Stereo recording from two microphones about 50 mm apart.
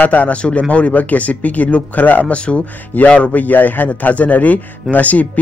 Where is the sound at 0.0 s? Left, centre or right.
Left.